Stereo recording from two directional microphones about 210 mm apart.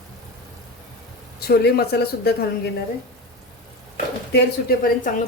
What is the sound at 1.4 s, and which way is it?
Speech, 50° left (ahead or behind).